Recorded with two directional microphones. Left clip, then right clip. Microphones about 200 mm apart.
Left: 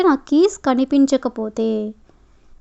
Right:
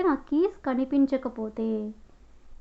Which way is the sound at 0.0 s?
40° left (ahead or behind).